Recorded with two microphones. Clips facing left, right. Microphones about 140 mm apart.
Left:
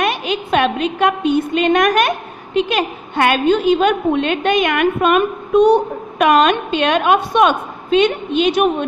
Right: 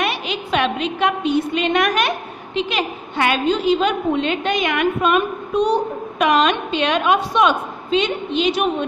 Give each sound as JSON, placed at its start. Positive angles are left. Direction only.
{"t": 0.0, "sound": "a woman's voice", "side_deg": 50}